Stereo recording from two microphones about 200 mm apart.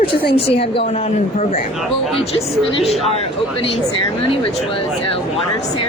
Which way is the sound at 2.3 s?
30° left (ahead or behind).